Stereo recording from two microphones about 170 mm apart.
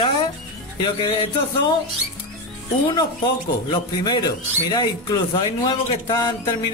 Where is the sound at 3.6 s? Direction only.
25° left (ahead or behind).